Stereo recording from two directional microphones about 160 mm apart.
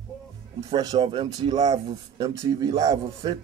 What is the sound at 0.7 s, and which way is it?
A man's voice, 30° right (ahead or behind).